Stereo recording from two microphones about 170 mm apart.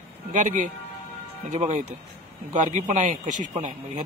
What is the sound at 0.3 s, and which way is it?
Speech, 50° right (ahead or behind).